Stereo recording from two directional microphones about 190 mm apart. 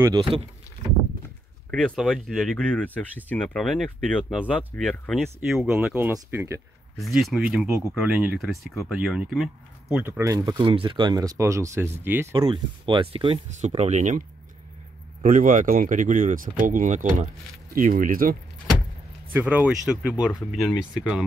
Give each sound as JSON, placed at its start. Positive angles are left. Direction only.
{"t": 0.0, "sound": "speech", "side_deg": -25}
{"t": 1.7, "sound": "speech", "side_deg": 5}
{"t": 7.0, "sound": "speech", "side_deg": 0}
{"t": 7.5, "sound": "speech", "side_deg": -15}
{"t": 12.4, "sound": "speech", "side_deg": -25}
{"t": 15.2, "sound": "speech", "side_deg": -45}
{"t": 19.3, "sound": "speech", "side_deg": -5}